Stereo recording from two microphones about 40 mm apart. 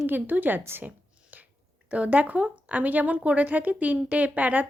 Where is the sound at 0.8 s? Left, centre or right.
Right.